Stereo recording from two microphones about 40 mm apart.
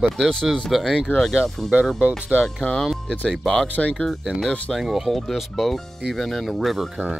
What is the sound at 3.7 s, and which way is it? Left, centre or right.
Speech, left.